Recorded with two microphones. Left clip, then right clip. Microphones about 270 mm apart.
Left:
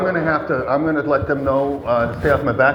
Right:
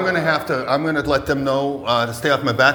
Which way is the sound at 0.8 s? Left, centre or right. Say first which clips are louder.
Left 1 dB; right.